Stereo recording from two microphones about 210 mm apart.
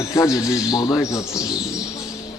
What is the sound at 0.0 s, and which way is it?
A man's voice, 15° left (ahead or behind).